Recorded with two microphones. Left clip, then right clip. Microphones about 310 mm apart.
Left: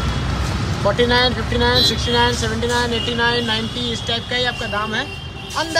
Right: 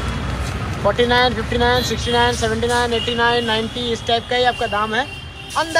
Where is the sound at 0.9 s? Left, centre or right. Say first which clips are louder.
Right 1 dB; centre.